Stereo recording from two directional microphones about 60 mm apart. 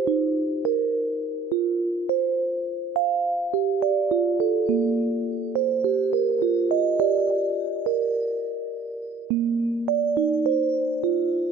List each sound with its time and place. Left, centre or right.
4.7 s music: right
6.5 s music: right
10.3 s music: right